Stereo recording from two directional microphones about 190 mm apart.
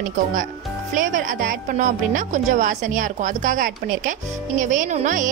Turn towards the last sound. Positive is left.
turn(degrees=-40)  # may be behind; listen again after turning